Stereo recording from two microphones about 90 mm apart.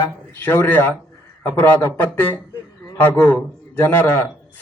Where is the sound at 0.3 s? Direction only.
25° left (ahead or behind).